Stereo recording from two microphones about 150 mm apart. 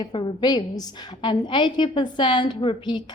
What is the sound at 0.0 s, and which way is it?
A woman's voice, 35° left (ahead or behind).